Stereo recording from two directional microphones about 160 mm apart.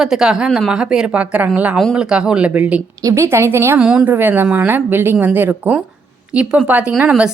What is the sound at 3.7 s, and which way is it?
Speech, 5° right (ahead or behind).